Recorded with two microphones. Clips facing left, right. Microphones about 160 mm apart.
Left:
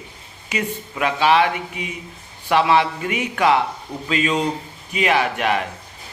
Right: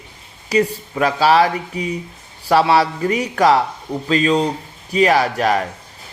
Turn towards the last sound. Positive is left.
turn(degrees=-35)  # may be behind; listen again after turning